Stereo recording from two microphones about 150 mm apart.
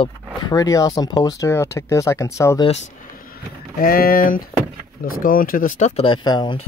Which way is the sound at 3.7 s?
75° left (ahead or behind).